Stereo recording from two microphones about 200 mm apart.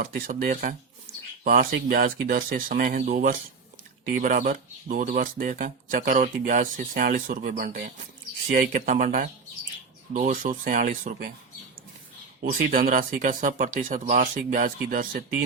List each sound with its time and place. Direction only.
0.0 s speech: 45° right (ahead or behind)
12.4 s speech: 45° right (ahead or behind)